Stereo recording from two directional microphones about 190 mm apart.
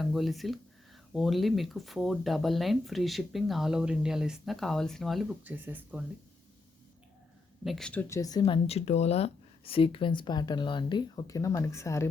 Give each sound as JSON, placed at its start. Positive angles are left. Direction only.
{"t": 0.0, "sound": "speech", "side_deg": 0}
{"t": 7.6, "sound": "speech", "side_deg": 0}